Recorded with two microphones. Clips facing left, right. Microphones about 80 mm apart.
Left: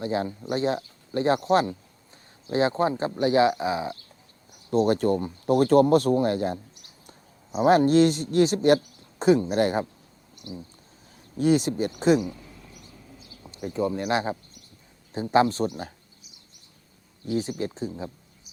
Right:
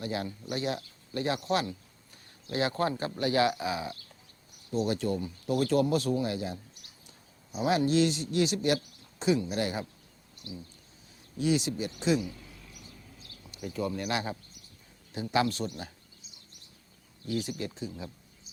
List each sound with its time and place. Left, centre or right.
0.0 s speech: left
4.7 s a man's voice: left
7.6 s a man's voice: left
11.3 s a man's voice: left
13.1 s a sound: centre
13.4 s a sound: left
13.7 s speech: left
17.2 s speech: left